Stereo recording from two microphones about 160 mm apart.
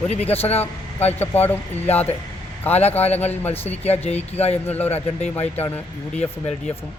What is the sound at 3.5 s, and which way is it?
Speech, 40° left (ahead or behind).